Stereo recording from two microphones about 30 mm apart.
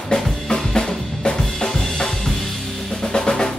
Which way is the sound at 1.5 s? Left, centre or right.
Centre.